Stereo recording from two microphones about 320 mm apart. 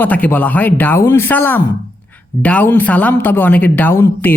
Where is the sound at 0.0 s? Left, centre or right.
Centre.